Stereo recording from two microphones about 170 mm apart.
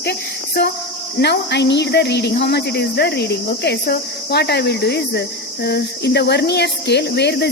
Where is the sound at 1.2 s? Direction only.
80° left.